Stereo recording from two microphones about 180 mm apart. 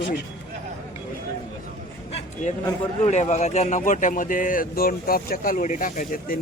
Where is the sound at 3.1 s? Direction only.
40° left (ahead or behind).